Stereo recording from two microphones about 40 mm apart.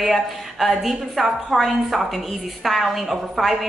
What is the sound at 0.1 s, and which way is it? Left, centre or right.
Speech, centre.